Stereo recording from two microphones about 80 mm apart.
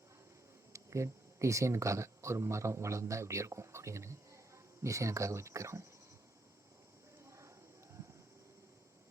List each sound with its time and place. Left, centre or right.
0.7 s speech: right
7.3 s clip-clop: right